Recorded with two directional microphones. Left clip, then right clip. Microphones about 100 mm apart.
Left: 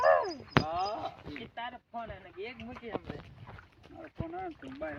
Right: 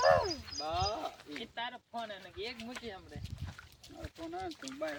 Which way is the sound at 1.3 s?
30° right (ahead or behind).